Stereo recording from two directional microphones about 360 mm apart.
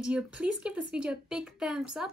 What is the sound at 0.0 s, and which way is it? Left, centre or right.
Speech, centre.